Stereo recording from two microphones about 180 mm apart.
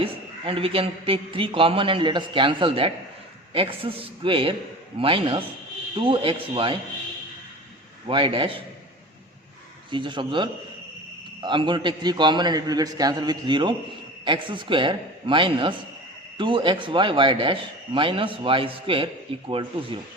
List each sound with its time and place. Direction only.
0.0 s a man's voice: 30° right (ahead or behind)
8.0 s speech: 30° right (ahead or behind)
9.9 s speech: 25° right (ahead or behind)